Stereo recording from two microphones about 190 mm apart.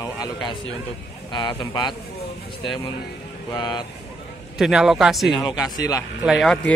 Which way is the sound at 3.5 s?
20° left (ahead or behind).